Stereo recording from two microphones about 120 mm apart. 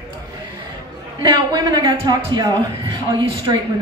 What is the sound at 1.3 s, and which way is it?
A woman's voice, 35° right (ahead or behind).